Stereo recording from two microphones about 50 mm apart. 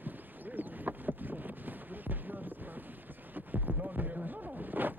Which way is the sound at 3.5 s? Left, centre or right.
Right.